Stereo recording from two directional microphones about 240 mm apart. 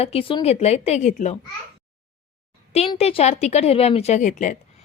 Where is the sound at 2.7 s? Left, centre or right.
Left.